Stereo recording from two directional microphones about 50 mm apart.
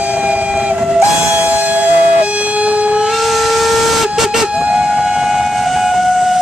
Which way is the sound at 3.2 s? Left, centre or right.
Centre.